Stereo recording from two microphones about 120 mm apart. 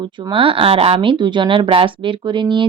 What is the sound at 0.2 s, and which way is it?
Speech, 45° right (ahead or behind).